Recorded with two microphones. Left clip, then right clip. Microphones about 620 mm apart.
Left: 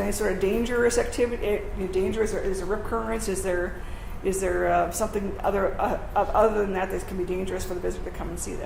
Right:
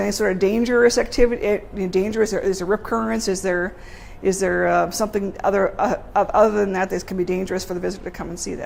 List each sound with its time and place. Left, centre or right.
0.0 s a woman's voice: right